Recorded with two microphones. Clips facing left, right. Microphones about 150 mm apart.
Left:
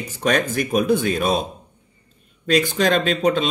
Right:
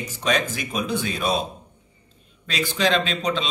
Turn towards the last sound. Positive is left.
turn(degrees=50)  # may be behind; listen again after turning